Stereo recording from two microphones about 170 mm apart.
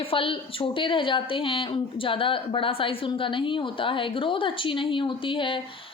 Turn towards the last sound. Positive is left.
turn(degrees=30)  # may be behind; listen again after turning